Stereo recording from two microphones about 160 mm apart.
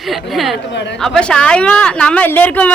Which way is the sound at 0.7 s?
90° left.